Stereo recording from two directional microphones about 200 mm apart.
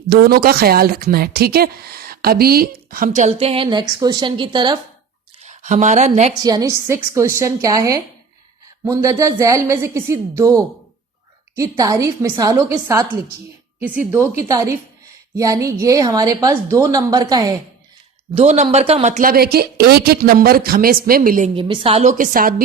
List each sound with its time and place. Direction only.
0.1 s a woman's voice: 50° right (ahead or behind)
3.3 s a woman's voice: 25° right (ahead or behind)
5.4 s a woman's voice: 35° right (ahead or behind)
6.4 s a woman's voice: 20° right (ahead or behind)
11.8 s a woman's voice: 15° right (ahead or behind)
14.1 s a woman's voice: 15° right (ahead or behind)
18.3 s a woman's voice: 35° right (ahead or behind)
21.5 s a woman's voice: 25° right (ahead or behind)
22.2 s a woman's voice: 45° right (ahead or behind)